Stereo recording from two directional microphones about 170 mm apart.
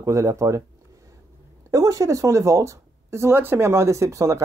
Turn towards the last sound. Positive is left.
turn(degrees=-15)  # may be behind; listen again after turning